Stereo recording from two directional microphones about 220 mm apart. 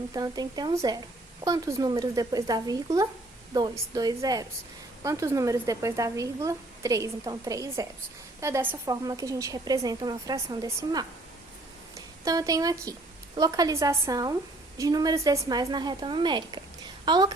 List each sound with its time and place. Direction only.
0.1 s a woman's voice: 15° right (ahead or behind)